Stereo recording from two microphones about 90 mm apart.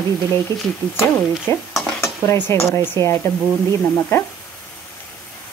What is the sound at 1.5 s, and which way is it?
Speech, 30° left (ahead or behind).